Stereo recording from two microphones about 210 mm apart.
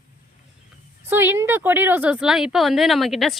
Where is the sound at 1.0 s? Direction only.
10° right (ahead or behind).